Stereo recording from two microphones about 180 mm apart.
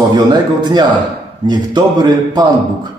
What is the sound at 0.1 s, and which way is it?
A man's voice, 25° right (ahead or behind).